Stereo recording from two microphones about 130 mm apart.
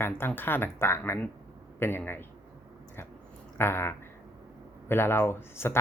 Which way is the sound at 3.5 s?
20° left (ahead or behind).